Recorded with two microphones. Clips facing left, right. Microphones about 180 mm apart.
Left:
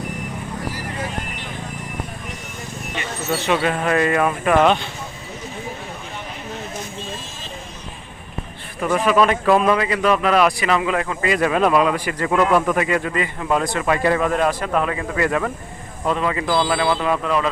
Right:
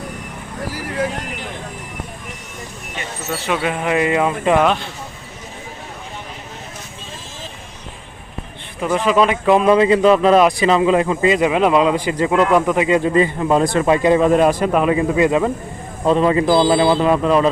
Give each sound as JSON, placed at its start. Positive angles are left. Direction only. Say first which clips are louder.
{"t": 3.4, "sound": "speech", "louder": "even", "side_deg": -5}
{"t": 4.6, "sound": "speech", "louder": "left 1 dB", "side_deg": 0}
{"t": 9.0, "sound": "speech", "louder": "right 2 dB", "side_deg": -20}